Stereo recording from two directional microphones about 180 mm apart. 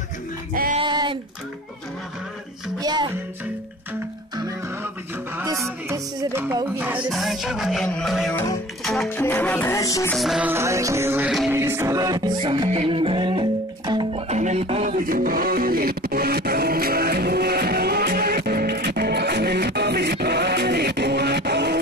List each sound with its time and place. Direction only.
0.7 s a sound: 25° right (ahead or behind)
2.8 s music: 25° right (ahead or behind)
5.4 s music: 15° right (ahead or behind); by 10.1 s 15° left (ahead or behind)
10.1 s music: centre (ahead or behind); by 14.2 s 25° right (ahead or behind)
14.3 s music: 40° right (ahead or behind); by 21.7 s 70° right (ahead or behind)